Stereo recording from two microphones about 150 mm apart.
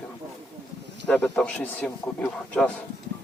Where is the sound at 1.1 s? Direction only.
5° left (ahead or behind).